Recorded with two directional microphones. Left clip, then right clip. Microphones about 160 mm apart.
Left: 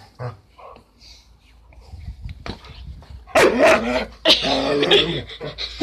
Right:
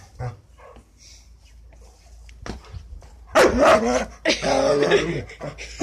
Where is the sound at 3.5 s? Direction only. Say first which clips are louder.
Left 1 dB; 15° right (ahead or behind).